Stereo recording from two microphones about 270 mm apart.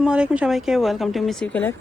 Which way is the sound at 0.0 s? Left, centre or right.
Centre.